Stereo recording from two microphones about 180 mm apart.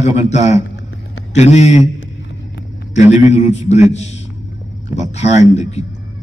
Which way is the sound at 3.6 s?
40° left (ahead or behind).